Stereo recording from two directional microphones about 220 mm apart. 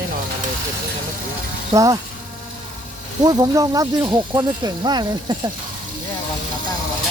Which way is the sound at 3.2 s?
15° right (ahead or behind).